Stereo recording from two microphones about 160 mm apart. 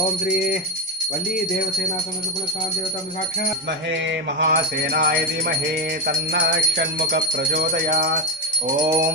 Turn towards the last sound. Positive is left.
turn(degrees=-90)